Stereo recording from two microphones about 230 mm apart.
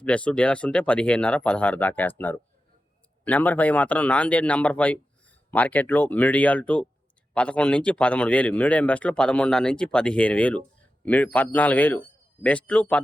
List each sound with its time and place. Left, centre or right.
0.0 s a man's voice: centre